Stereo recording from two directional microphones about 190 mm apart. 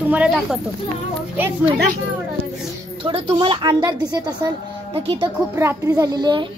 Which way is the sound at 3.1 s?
25° right (ahead or behind).